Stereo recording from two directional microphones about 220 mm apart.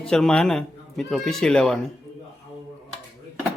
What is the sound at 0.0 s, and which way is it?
Speech, 5° left (ahead or behind).